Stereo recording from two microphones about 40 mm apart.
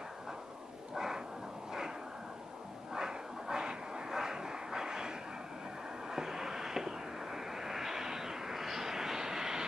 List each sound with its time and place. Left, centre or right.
0.9 s a sound: centre
2.9 s dog: centre
6.0 s vehicle: centre